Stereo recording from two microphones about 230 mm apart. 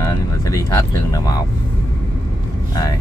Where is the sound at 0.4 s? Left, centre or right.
Centre.